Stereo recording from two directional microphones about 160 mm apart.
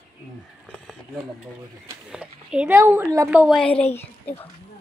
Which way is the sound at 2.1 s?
5° right (ahead or behind).